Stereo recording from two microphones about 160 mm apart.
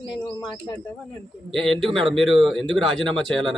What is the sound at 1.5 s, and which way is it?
Speech, centre (ahead or behind).